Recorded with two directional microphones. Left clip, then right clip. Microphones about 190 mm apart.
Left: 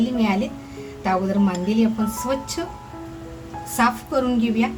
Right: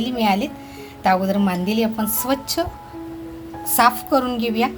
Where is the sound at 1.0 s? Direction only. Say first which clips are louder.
Right 4 dB; 55° right (ahead or behind).